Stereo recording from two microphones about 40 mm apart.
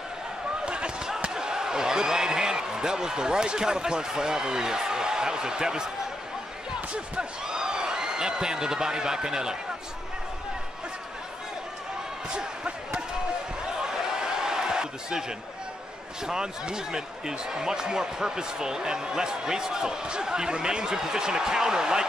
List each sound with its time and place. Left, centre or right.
0.7 s basketball bounce: right
1.3 s speech: centre
6.9 s speech: right
12.4 s basketball bounce: right
13.7 s a sound: centre
16.2 s speech: centre